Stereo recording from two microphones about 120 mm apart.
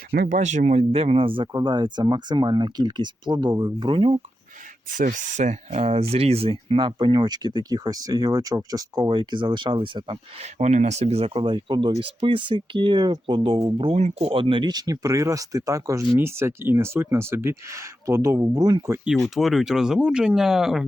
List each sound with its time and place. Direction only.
0.3 s speech: 85° right
0.8 s speech: 55° right (ahead or behind)
5.0 s speech: 90° right
5.8 s speech: 55° right (ahead or behind)
11.4 s speech: 40° right (ahead or behind)
13.6 s speech: 30° right (ahead or behind)
13.8 s speech: 60° right (ahead or behind); by 18.8 s 30° right (ahead or behind)
19.0 s speech: centre (ahead or behind)